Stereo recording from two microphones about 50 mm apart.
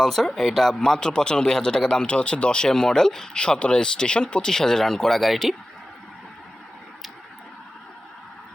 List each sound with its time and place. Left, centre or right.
0.0 s speech: centre
0.8 s speech: centre
4.5 s speech: centre